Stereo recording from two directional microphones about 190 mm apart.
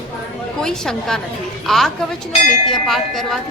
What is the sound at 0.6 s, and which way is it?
A woman's voice, 5° left (ahead or behind).